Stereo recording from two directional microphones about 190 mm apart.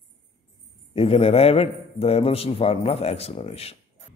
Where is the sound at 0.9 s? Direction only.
30° left (ahead or behind).